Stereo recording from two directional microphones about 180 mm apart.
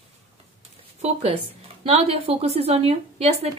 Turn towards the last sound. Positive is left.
turn(degrees=-35)  # may be behind; listen again after turning